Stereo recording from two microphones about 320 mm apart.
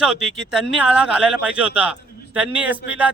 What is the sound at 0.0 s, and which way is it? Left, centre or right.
Speech, centre.